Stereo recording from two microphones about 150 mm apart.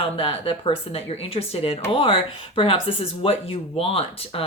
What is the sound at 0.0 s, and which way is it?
A woman's voice, 40° left (ahead or behind).